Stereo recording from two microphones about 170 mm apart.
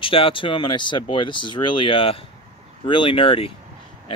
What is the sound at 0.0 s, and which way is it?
Speech, 30° left (ahead or behind).